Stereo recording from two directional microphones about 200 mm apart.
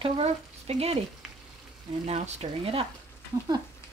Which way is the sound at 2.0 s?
35° right (ahead or behind).